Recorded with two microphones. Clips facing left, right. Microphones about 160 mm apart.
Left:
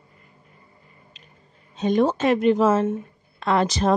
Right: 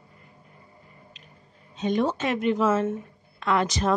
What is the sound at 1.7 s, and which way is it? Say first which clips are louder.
Speech: left 5 dB; 40° left (ahead or behind).